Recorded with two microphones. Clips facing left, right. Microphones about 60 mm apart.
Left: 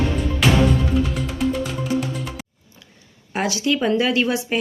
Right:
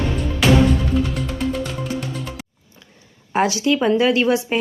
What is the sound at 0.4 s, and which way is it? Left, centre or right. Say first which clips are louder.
Music: right 2 dB; centre.